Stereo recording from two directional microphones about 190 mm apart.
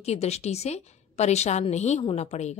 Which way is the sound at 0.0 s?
35° left (ahead or behind).